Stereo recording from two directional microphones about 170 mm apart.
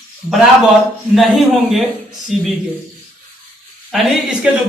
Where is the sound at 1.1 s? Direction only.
Centre (ahead or behind).